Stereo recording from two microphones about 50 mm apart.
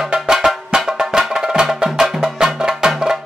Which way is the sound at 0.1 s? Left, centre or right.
Centre.